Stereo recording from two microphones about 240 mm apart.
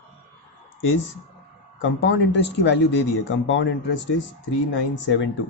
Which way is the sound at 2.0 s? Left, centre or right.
Left.